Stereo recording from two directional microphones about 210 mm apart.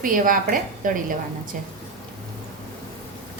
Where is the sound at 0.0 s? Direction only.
40° right (ahead or behind).